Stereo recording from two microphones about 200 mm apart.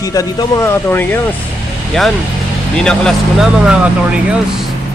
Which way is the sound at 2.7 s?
5° left (ahead or behind).